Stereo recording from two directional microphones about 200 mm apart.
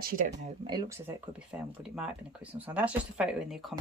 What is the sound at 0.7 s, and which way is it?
A woman's voice, 15° right (ahead or behind).